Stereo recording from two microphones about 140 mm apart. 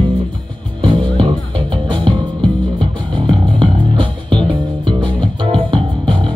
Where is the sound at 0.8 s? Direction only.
35° right (ahead or behind).